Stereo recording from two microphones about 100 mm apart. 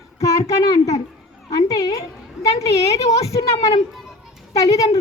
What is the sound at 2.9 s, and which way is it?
Speech, 90° left.